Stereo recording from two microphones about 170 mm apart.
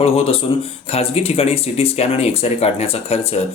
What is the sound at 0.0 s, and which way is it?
Speech, 35° left (ahead or behind).